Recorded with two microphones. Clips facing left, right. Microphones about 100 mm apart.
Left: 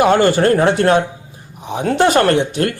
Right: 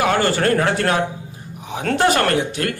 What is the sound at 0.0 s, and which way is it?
A man's voice, 25° left (ahead or behind).